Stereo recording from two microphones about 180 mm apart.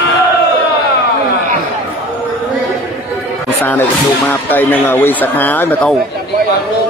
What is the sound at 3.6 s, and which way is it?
Speech, 10° left (ahead or behind).